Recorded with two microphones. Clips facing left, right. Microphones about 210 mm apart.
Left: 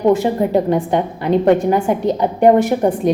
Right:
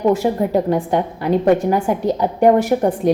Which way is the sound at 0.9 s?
20° left (ahead or behind).